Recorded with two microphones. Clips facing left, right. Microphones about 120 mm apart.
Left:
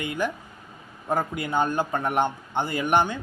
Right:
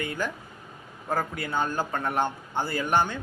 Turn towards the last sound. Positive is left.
turn(degrees=15)  # may be behind; listen again after turning